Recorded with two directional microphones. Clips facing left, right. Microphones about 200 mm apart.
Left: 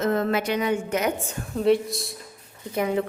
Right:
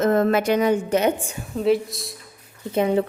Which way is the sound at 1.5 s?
Centre (ahead or behind).